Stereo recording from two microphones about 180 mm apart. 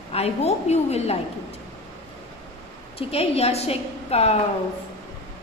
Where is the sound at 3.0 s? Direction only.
35° left (ahead or behind).